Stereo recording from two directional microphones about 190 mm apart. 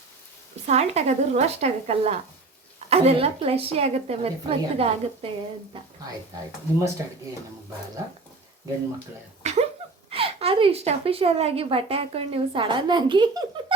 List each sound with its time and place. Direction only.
0.7 s a woman's voice: 35° right (ahead or behind)
7.0 s speech: 15° right (ahead or behind)
9.4 s a sound: 35° right (ahead or behind)
10.1 s a woman's voice: 30° right (ahead or behind)